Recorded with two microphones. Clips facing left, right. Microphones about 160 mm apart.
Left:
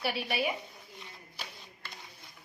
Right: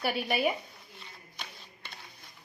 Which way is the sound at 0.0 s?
50° right (ahead or behind).